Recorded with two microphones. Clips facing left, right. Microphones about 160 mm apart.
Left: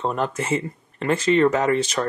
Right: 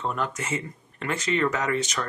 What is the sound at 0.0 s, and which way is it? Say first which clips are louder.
Speech: left 5 dB; 35° left (ahead or behind).